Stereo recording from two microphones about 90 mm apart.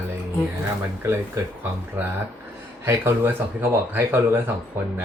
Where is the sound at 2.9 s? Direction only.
25° right (ahead or behind).